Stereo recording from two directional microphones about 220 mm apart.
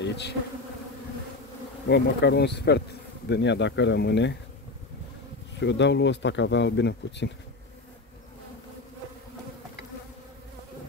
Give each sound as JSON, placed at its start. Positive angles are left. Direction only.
{"t": 0.0, "sound": "bee", "side_deg": 50}
{"t": 1.9, "sound": "speech", "side_deg": 50}
{"t": 5.6, "sound": "speech", "side_deg": 55}